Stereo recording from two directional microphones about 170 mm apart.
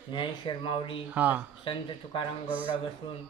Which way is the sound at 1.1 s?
10° right (ahead or behind).